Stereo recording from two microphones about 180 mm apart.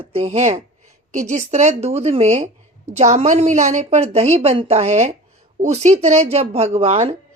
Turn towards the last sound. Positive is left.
turn(degrees=-35)  # may be behind; listen again after turning